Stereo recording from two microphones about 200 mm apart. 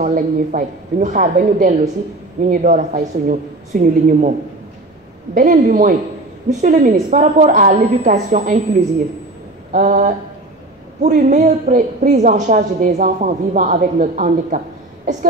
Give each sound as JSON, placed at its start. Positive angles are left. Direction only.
{"t": 0.0, "sound": "a woman's voice", "side_deg": -40}
{"t": 5.3, "sound": "a woman's voice", "side_deg": -40}
{"t": 9.7, "sound": "a woman's voice", "side_deg": -40}